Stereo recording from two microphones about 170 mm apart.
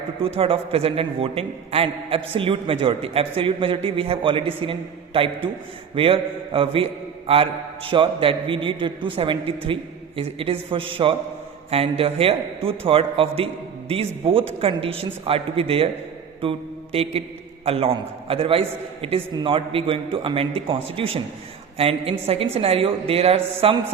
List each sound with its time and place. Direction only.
0.3 s a man's voice: 35° right (ahead or behind)
7.9 s a man's voice: 30° right (ahead or behind)
16.4 s mantra: 35° right (ahead or behind)
17.7 s a man's voice: 35° right (ahead or behind)